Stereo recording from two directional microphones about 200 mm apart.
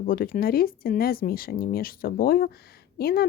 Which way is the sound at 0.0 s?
45° left (ahead or behind).